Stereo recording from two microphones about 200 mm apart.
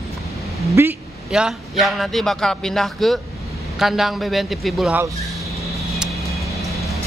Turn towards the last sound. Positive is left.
turn(degrees=0)  # may be behind; listen again after turning